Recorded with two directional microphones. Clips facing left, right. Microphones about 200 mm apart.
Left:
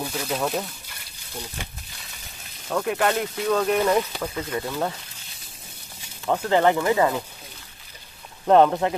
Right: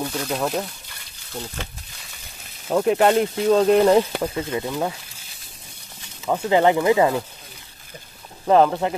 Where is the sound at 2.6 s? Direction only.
25° right (ahead or behind).